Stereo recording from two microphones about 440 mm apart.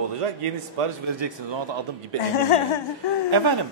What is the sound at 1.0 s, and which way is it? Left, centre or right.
Speech, right.